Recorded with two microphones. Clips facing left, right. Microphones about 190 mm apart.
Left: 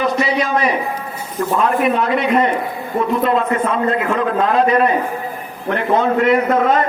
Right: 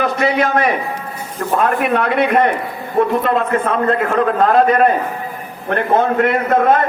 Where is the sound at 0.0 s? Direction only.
55° right (ahead or behind).